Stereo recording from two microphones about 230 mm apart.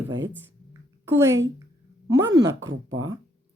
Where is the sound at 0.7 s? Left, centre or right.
Centre.